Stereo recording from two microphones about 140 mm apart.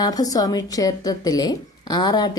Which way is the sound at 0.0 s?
25° left (ahead or behind).